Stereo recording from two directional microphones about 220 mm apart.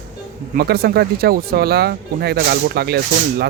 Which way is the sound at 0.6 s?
45° right (ahead or behind).